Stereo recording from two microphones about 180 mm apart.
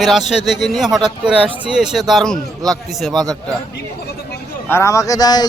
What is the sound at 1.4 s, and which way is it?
Speech, 30° right (ahead or behind).